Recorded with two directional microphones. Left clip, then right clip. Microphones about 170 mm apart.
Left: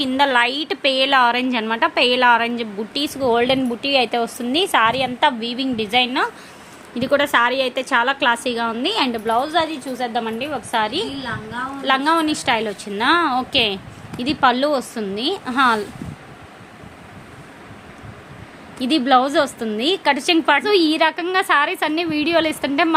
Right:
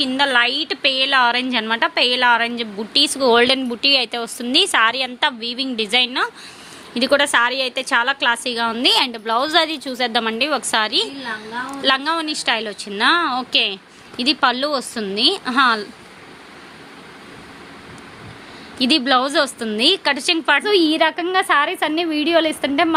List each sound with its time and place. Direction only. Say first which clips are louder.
0.0 s a woman's voice: even; 10° left (ahead or behind); by 9.3 s 20° right (ahead or behind)
9.3 s a woman's voice: right 3 dB; 40° right (ahead or behind); by 15.9 s 10° right (ahead or behind)
18.8 s a woman's voice: even; 10° right (ahead or behind)